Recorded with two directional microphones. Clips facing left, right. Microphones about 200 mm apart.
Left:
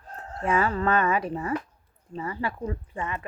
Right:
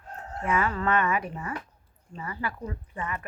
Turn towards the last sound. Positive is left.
turn(degrees=30)  # may be behind; listen again after turning